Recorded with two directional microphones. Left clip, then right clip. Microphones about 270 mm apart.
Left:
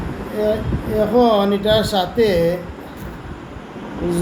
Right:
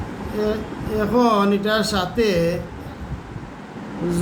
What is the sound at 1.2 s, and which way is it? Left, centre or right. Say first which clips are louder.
Speech: left 3 dB; centre.